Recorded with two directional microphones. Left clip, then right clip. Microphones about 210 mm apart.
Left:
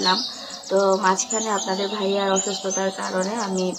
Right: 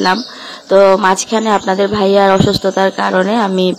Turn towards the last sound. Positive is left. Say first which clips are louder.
# right 12 dB
turn(degrees=-45)  # may be behind; listen again after turning